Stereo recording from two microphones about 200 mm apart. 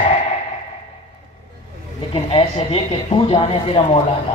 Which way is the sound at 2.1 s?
25° left (ahead or behind).